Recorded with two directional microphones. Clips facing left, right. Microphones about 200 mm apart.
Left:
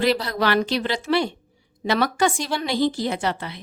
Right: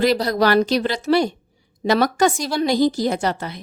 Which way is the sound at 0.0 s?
40° right (ahead or behind).